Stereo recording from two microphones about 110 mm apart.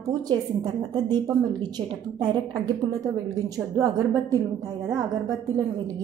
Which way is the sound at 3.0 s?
30° right (ahead or behind).